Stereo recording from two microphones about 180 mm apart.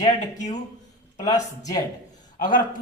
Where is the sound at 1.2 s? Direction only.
20° left (ahead or behind).